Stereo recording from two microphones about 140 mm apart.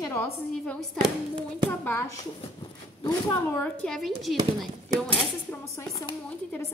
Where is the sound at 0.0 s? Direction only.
15° left (ahead or behind).